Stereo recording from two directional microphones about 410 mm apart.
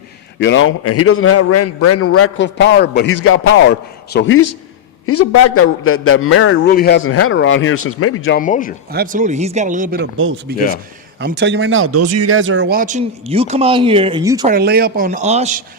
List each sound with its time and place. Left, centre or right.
0.3 s a man's voice: left
8.9 s speech: right
14.5 s speech: right